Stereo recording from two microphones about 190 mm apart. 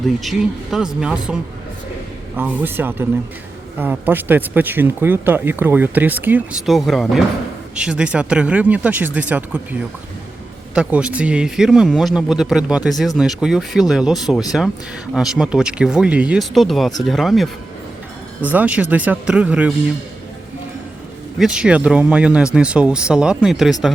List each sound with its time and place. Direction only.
0.2 s speech: centre (ahead or behind)
10.8 s speech: 5° right (ahead or behind)
21.3 s speech: 5° right (ahead or behind)